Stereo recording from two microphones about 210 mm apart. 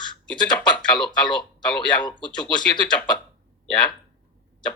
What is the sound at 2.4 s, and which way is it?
Speech, 5° left (ahead or behind).